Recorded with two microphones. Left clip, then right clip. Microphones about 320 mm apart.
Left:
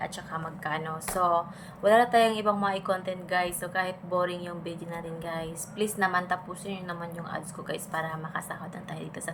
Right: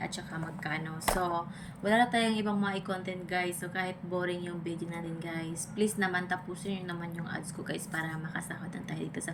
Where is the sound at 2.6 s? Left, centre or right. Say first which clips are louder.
Left 6 dB; centre.